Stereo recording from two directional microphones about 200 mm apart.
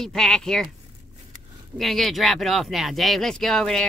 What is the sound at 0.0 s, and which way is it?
Speech, centre (ahead or behind).